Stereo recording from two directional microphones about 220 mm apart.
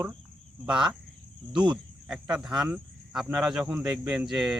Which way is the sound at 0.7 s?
5° right (ahead or behind).